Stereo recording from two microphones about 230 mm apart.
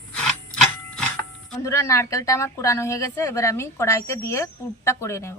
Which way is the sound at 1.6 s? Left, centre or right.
Centre.